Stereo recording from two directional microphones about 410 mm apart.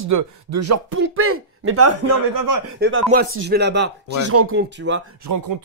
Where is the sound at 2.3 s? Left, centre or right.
Right.